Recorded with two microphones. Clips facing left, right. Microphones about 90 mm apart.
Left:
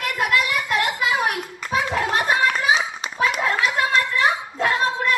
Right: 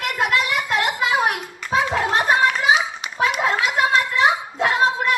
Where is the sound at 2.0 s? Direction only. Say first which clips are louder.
Right 2 dB; 25° right (ahead or behind).